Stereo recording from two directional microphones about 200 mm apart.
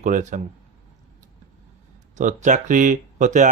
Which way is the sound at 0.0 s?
40° right (ahead or behind).